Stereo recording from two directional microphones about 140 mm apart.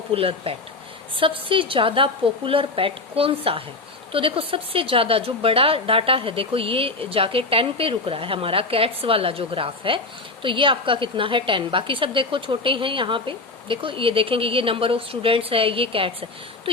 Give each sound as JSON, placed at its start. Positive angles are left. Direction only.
{"t": 0.1, "sound": "a woman's voice", "side_deg": -45}